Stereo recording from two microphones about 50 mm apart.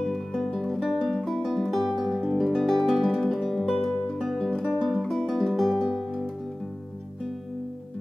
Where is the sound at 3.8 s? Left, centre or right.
Centre.